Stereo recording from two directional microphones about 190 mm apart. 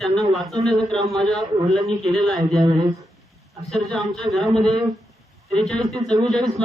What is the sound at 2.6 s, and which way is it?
Speech, 20° right (ahead or behind).